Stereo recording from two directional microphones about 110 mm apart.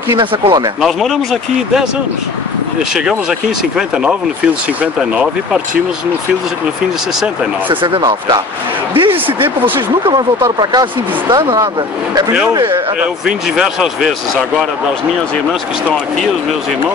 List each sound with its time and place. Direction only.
0.2 s a man's voice: 45° right (ahead or behind)
3.7 s speech: 5° right (ahead or behind)
8.9 s a man's voice: 45° right (ahead or behind)
13.6 s speech: 5° right (ahead or behind)